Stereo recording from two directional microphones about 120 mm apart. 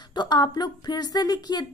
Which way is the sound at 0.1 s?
35° left (ahead or behind).